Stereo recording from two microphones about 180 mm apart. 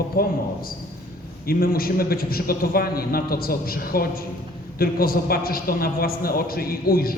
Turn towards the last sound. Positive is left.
turn(degrees=55)  # may be behind; listen again after turning